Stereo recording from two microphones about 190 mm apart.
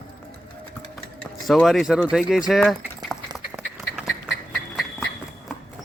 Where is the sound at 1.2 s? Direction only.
5° left (ahead or behind).